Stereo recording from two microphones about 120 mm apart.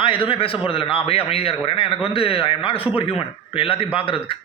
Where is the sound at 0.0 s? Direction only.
45° left (ahead or behind).